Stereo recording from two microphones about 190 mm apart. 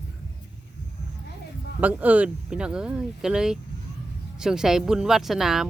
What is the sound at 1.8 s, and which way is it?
Speech, 10° right (ahead or behind).